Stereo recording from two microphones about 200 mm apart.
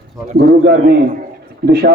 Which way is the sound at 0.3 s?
50° right (ahead or behind).